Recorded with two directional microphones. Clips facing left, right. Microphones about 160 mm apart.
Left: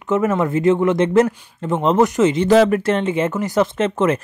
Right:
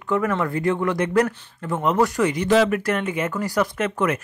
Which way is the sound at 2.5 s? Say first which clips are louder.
Left 4 dB; 40° left (ahead or behind).